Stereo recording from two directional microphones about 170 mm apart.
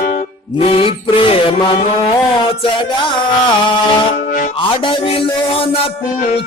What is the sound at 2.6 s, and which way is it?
Music, 30° left (ahead or behind).